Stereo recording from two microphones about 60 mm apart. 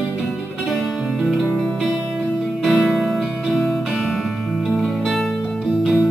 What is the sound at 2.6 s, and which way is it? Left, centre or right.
Music, centre.